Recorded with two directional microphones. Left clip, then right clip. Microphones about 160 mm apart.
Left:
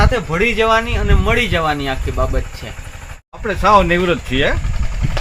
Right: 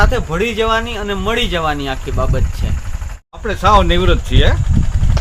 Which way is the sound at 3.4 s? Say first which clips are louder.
Even; 20° right (ahead or behind).